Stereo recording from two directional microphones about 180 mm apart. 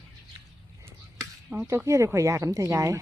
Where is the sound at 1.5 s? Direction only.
10° right (ahead or behind).